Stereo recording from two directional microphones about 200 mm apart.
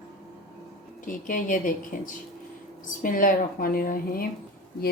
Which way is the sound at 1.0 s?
40° left (ahead or behind).